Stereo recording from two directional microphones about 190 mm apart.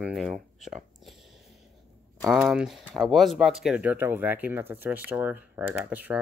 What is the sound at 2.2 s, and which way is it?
Speech, centre (ahead or behind).